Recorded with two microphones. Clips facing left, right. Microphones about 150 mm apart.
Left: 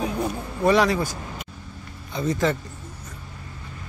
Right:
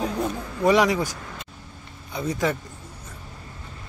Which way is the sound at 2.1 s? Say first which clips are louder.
Left 2 dB; 10° right (ahead or behind).